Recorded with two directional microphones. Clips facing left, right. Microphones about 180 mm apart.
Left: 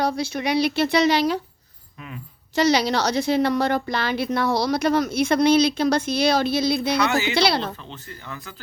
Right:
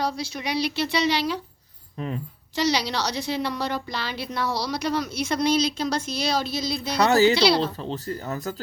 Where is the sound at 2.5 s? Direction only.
50° left (ahead or behind).